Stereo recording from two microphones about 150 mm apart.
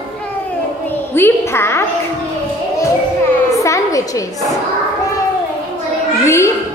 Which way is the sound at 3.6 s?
20° left (ahead or behind).